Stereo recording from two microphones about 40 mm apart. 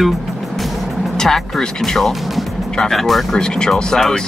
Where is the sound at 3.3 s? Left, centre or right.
Centre.